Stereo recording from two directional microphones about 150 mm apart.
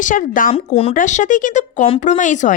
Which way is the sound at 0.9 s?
55° left (ahead or behind).